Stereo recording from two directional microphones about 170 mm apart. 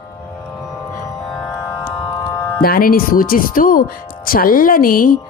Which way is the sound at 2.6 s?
60° left (ahead or behind).